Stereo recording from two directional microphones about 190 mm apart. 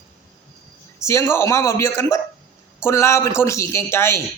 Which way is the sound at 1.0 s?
15° left (ahead or behind).